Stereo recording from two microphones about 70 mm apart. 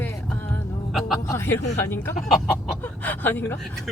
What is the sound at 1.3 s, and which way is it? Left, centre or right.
Speech, left.